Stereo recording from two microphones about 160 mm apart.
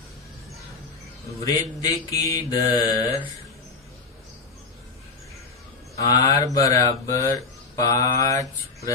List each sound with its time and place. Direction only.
1.5 s mantra: 20° left (ahead or behind)
6.0 s mantra: 20° left (ahead or behind)